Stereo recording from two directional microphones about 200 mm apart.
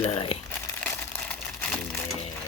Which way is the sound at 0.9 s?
5° left (ahead or behind).